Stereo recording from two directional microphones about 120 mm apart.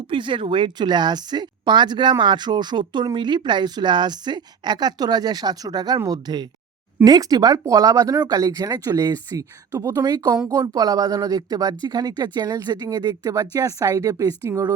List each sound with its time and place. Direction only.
0.1 s speech: 45° right (ahead or behind); by 14.7 s 25° right (ahead or behind)